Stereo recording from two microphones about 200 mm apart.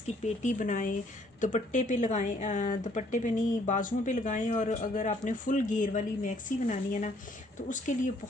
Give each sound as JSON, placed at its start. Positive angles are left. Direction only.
{"t": 0.4, "sound": "speech", "side_deg": 40}